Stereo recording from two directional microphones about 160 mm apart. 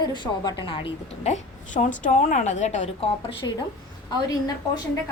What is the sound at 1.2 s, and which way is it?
A woman's voice, 45° left (ahead or behind).